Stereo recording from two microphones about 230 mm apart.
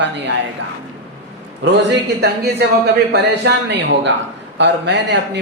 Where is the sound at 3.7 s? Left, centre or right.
Right.